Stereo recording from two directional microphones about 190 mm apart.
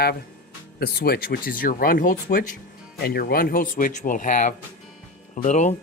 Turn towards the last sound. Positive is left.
turn(degrees=40)  # may be behind; listen again after turning